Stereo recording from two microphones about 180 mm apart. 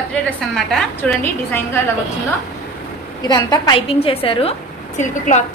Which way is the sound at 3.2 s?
20° left (ahead or behind).